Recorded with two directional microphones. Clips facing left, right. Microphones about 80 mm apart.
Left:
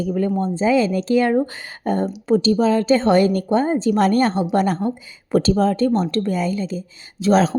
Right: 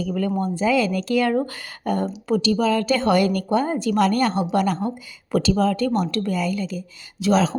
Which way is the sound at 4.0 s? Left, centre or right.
Left.